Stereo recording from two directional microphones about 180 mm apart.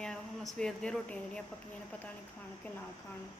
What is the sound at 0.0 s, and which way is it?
Speech, 5° left (ahead or behind).